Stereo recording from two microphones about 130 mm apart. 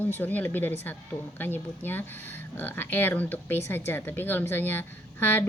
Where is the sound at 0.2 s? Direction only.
15° left (ahead or behind).